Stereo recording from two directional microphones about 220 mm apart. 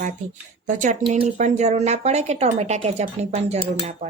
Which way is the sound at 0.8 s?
35° right (ahead or behind).